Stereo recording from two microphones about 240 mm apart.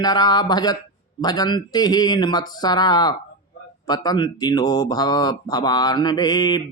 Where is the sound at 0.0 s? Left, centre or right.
Centre.